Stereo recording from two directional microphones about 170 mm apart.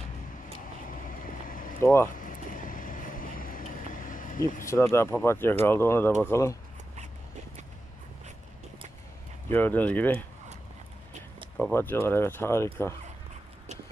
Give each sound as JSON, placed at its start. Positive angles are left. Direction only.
{"t": 0.8, "sound": "vehicle", "side_deg": 55}
{"t": 1.8, "sound": "speech", "side_deg": 15}
{"t": 2.1, "sound": "vehicle", "side_deg": 55}
{"t": 4.6, "sound": "speech", "side_deg": 15}
{"t": 9.5, "sound": "speech", "side_deg": 10}
{"t": 11.7, "sound": "speech", "side_deg": 10}